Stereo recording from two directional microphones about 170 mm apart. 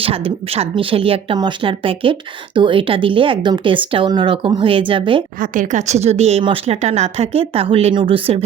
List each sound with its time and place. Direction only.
0.0 s a woman's voice: 35° right (ahead or behind)
5.4 s a woman's voice: 50° right (ahead or behind)